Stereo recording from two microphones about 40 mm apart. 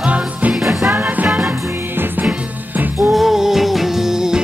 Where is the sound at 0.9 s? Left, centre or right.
Right.